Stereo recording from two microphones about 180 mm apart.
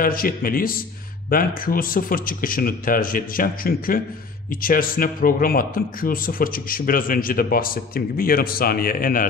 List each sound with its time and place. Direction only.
0.0 s speech: 55° left (ahead or behind)